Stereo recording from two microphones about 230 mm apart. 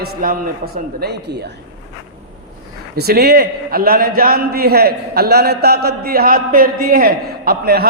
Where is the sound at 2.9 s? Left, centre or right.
Right.